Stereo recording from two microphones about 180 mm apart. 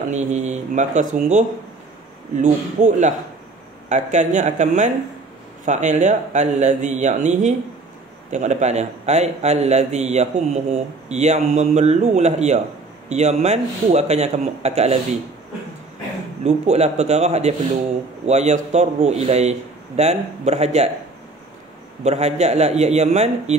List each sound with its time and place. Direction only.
0.1 s a man's voice: 40° right (ahead or behind)
2.4 s a man's voice: 40° right (ahead or behind)
16.4 s a man's voice: 35° right (ahead or behind)
22.0 s a man's voice: 40° right (ahead or behind)